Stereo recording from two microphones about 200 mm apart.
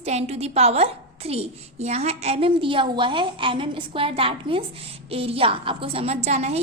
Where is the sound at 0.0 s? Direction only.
30° right (ahead or behind).